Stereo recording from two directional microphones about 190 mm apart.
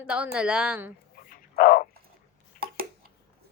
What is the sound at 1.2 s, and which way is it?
Dog, 50° left (ahead or behind).